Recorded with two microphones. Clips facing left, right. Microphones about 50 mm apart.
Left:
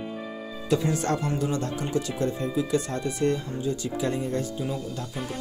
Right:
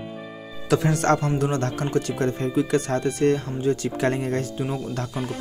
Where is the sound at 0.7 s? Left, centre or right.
Right.